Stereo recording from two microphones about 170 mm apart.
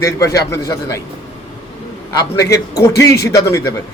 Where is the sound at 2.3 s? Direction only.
15° left (ahead or behind).